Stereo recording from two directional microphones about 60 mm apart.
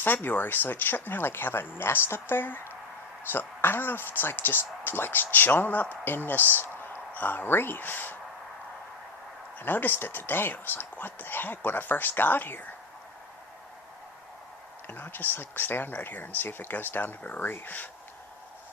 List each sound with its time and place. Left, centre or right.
0.0 s speech: left
9.6 s speech: left
14.8 s speech: left